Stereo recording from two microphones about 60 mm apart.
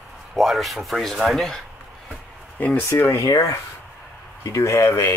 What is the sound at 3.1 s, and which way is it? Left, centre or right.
Speech, left.